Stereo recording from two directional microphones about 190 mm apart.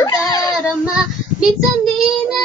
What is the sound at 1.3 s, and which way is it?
Child singing, centre (ahead or behind).